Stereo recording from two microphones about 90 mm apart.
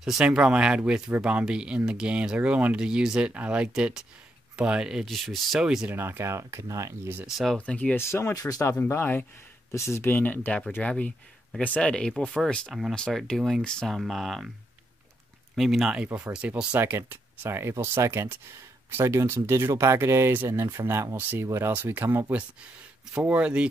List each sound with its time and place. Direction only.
0.0 s speech: 5° right (ahead or behind)
5.9 s speech: 25° right (ahead or behind)
7.2 s speech: centre (ahead or behind)
7.5 s speech: 15° left (ahead or behind)
8.0 s speech: 30° left (ahead or behind)
8.8 s speech: 25° left (ahead or behind); by 14.5 s centre (ahead or behind)
15.5 s speech: centre (ahead or behind); by 22.4 s 25° right (ahead or behind)
23.1 s speech: 15° right (ahead or behind)